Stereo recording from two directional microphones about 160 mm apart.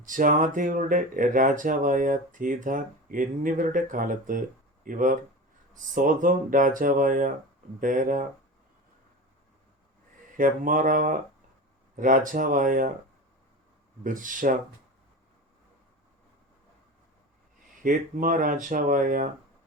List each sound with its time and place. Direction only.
0.0 s speech: 55° right (ahead or behind)
10.3 s speech: 55° right (ahead or behind)
14.0 s speech: 55° right (ahead or behind)
17.8 s speech: 55° right (ahead or behind)